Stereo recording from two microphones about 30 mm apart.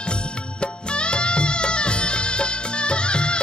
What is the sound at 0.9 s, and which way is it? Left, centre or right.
Music, left.